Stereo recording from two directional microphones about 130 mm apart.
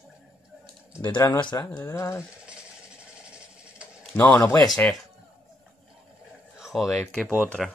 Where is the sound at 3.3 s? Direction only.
10° right (ahead or behind).